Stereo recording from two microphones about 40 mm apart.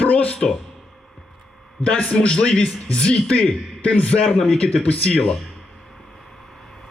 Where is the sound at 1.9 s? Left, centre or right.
Left.